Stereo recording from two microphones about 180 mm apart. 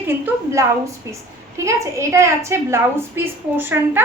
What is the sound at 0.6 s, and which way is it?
A woman's voice, 15° right (ahead or behind).